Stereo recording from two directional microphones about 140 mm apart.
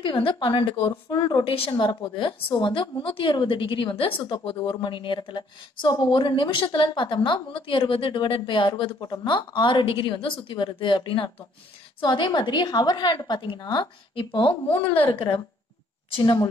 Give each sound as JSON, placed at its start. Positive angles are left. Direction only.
{"t": 0.0, "sound": "speech", "side_deg": 35}